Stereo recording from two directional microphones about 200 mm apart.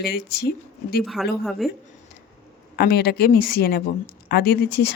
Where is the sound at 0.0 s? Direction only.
50° left (ahead or behind).